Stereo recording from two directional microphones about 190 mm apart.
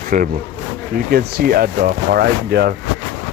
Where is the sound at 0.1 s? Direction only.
45° right (ahead or behind).